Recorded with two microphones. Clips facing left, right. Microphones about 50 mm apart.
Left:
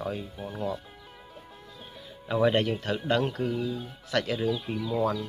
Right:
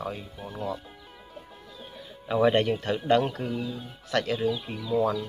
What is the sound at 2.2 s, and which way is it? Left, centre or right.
Speech, centre.